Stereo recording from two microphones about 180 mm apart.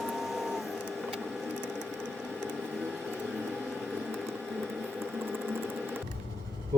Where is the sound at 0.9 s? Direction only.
5° left (ahead or behind).